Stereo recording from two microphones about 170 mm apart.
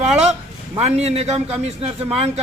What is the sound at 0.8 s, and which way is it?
A man's voice, 40° right (ahead or behind).